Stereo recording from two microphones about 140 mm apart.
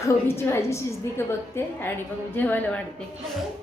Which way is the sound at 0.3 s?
15° left (ahead or behind).